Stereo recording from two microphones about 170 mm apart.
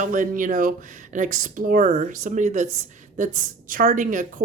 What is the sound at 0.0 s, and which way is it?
Speech, 50° right (ahead or behind).